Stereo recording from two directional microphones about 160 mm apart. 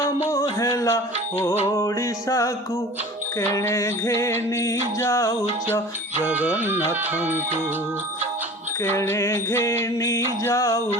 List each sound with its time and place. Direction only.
0.6 s mantra: 20° left (ahead or behind)
1.6 s music: 20° left (ahead or behind)
3.5 s mantra: 20° left (ahead or behind)
6.2 s music: 10° right (ahead or behind)
9.0 s mantra: 20° left (ahead or behind)